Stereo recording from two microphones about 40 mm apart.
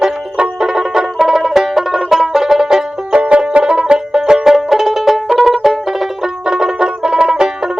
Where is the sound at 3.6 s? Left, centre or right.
Centre.